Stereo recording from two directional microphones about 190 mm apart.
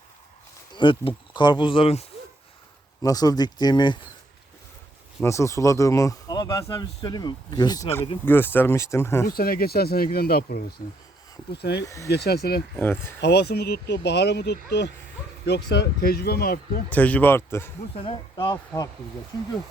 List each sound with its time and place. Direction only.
0.8 s speech: 25° left (ahead or behind)
3.0 s speech: 20° left (ahead or behind)
5.2 s a man's voice: 15° left (ahead or behind)
9.2 s speech: 50° left (ahead or behind)
12.8 s a man's voice: 10° left (ahead or behind)
13.2 s speech: 60° left (ahead or behind)
16.9 s a man's voice: 10° left (ahead or behind)
17.9 s speech: 25° left (ahead or behind)